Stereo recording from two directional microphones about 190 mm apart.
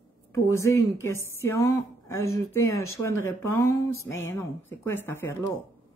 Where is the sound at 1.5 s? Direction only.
15° left (ahead or behind).